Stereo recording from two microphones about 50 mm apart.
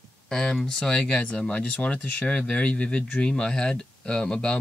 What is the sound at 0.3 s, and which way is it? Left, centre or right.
Speech, centre.